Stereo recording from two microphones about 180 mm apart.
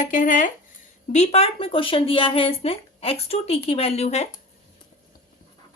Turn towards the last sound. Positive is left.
turn(degrees=35)  # may be behind; listen again after turning